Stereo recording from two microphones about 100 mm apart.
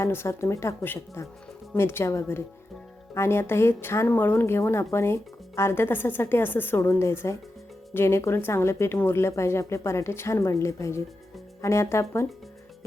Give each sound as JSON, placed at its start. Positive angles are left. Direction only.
{"t": 0.0, "sound": "speech", "side_deg": 25}